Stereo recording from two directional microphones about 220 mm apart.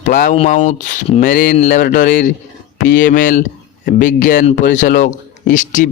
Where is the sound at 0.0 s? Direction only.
35° left (ahead or behind).